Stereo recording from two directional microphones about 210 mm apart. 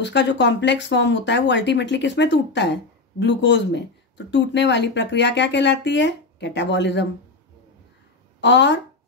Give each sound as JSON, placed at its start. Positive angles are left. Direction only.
{"t": 0.0, "sound": "speech", "side_deg": 55}
{"t": 8.4, "sound": "speech", "side_deg": 60}